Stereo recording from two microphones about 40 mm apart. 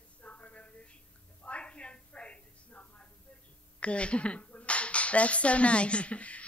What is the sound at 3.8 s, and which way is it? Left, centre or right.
Speech, left.